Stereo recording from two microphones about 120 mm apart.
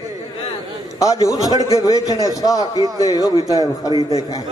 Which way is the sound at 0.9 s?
30° left (ahead or behind).